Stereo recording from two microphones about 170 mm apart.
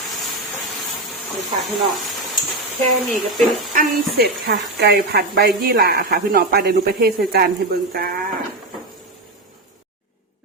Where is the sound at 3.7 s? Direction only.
60° right (ahead or behind).